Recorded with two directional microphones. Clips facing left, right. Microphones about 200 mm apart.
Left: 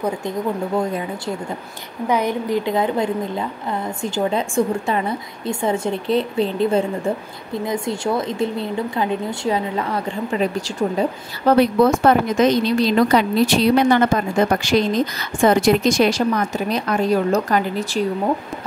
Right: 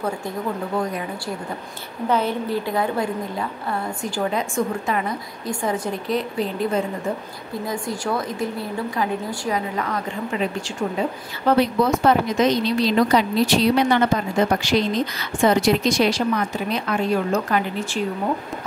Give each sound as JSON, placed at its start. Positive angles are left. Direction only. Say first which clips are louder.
{"t": 2.0, "sound": "a woman's voice", "louder": "left 2 dB", "side_deg": 15}
{"t": 11.5, "sound": "a woman's voice", "louder": "left 4 dB", "side_deg": 55}